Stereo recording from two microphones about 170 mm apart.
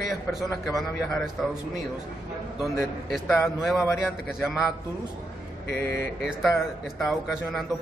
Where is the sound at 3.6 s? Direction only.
5° right (ahead or behind).